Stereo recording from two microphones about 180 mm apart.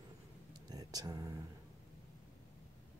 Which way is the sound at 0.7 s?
20° right (ahead or behind).